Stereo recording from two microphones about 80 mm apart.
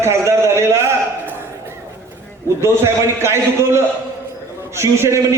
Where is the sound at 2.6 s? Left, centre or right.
Right.